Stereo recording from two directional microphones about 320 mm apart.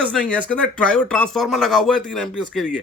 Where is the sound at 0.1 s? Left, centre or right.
Centre.